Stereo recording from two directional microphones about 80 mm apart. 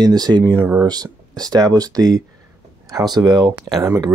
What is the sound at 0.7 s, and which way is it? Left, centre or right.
Speech, right.